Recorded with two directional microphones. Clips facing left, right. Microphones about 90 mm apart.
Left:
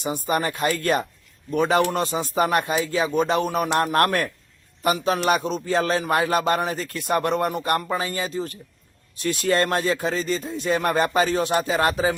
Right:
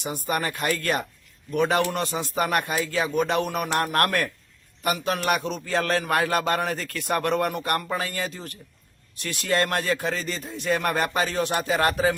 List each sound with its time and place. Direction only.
0.0 s speech: 25° left (ahead or behind)